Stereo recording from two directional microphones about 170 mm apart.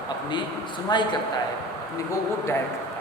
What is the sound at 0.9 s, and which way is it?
Speech, 25° left (ahead or behind).